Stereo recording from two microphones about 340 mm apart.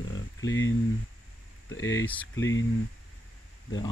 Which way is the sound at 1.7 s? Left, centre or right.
Left.